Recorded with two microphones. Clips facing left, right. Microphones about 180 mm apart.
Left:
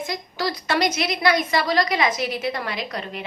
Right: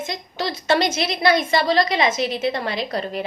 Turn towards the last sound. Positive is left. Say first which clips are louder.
# right 5 dB
turn(degrees=-35)  # may be behind; listen again after turning